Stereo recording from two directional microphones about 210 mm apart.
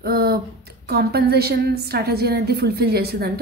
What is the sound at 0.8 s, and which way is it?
A woman's voice, 50° right (ahead or behind).